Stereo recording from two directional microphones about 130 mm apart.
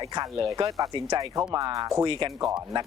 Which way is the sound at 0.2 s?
30° right (ahead or behind).